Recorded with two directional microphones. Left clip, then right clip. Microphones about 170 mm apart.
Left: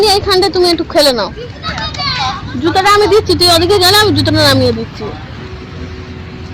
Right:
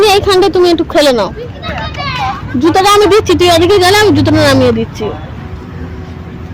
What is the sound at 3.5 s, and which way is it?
Speech, 20° right (ahead or behind).